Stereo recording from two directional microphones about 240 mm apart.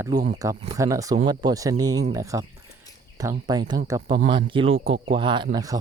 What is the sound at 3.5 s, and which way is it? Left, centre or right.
Speech, centre.